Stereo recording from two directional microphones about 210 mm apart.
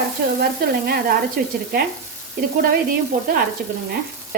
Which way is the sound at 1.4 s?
45° right (ahead or behind).